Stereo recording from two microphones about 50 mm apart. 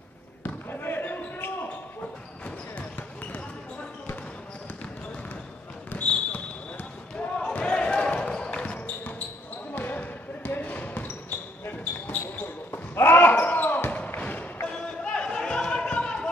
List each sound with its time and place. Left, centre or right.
0.4 s basketball bounce: left
3.0 s basketball bounce: left
5.9 s basketball bounce: left
7.3 s basketball bounce: left
8.7 s basketball bounce: left
12.7 s basketball bounce: left
13.8 s thump: left
14.7 s a sound: centre